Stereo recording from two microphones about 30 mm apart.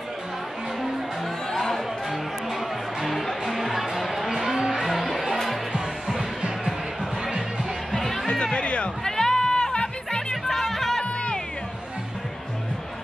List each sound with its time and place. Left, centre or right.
1.5 s music: centre
2.0 s music: centre
3.1 s music: centre
4.0 s a sound: centre
4.3 s music: centre
6.1 s music: right
8.0 s music: centre
8.5 s music: left
9.0 s music: centre
10.5 s music: centre
11.1 s music: left